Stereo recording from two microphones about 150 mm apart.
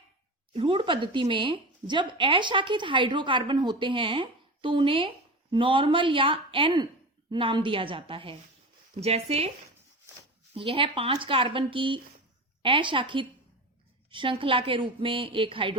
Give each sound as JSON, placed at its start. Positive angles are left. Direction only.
{"t": 0.5, "sound": "a woman's voice", "side_deg": -35}
{"t": 10.5, "sound": "a woman's voice", "side_deg": -35}